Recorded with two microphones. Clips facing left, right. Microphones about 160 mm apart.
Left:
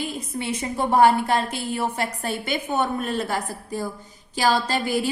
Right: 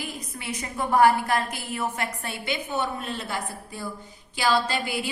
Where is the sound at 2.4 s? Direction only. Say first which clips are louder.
Left 3 dB; 50° left (ahead or behind).